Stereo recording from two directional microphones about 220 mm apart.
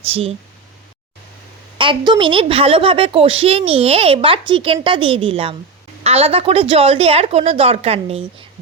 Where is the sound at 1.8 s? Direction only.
20° right (ahead or behind).